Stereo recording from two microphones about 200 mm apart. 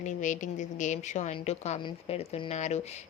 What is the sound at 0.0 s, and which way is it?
A woman's voice, 40° left (ahead or behind).